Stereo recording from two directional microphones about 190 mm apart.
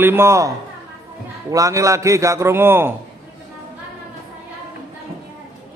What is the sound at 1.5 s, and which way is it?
A man's voice, 15° right (ahead or behind).